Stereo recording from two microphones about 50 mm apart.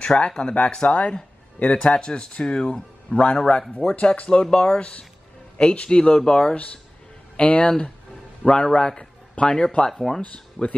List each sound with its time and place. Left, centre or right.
0.0 s speech: centre
4.2 s speech: left
6.5 s a man's voice: left; by 10.2 s centre
10.2 s speech: left